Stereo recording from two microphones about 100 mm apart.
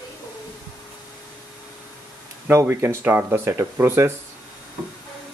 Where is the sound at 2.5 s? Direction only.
25° right (ahead or behind).